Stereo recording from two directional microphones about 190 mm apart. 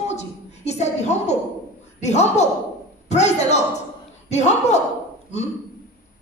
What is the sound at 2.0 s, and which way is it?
A woman's voice, 35° left (ahead or behind).